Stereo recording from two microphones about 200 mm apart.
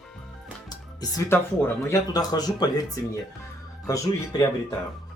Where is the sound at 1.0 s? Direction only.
20° left (ahead or behind).